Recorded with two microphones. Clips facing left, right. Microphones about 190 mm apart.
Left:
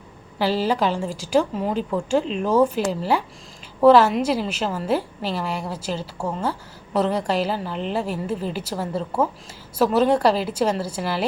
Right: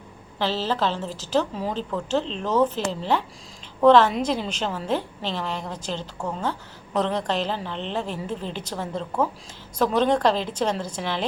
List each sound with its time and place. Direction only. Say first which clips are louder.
0.3 s a woman's voice: left 4 dB; 10° left (ahead or behind)